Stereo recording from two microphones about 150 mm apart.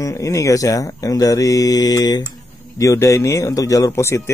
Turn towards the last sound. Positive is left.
turn(degrees=20)  # may be behind; listen again after turning